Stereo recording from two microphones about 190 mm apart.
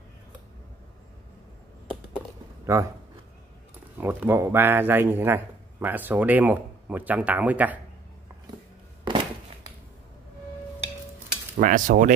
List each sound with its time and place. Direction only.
2.6 s speech: 15° right (ahead or behind)
4.0 s a man's voice: 10° right (ahead or behind)
9.0 s a sound: 25° right (ahead or behind)
11.5 s cutlery: 45° right (ahead or behind)